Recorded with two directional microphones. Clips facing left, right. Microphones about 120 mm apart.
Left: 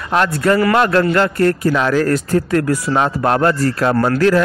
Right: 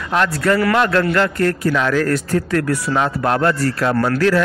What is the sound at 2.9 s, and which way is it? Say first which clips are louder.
A man's voice: left 2 dB; 35° left (ahead or behind).